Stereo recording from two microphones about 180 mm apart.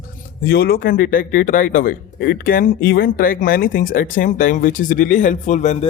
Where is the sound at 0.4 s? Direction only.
55° left (ahead or behind).